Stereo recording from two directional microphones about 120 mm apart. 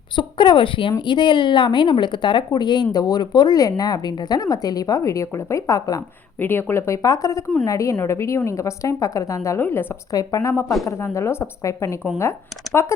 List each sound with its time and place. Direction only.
0.2 s speech: 40° left (ahead or behind)
6.4 s a woman's voice: 20° left (ahead or behind)
10.1 s a woman's voice: 30° left (ahead or behind)